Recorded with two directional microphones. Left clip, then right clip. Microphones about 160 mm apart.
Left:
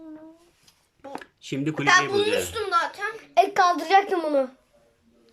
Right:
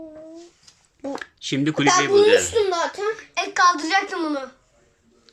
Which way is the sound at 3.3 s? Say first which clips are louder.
Even; 55° left (ahead or behind).